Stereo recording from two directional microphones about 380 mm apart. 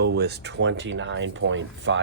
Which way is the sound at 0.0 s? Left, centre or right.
Right.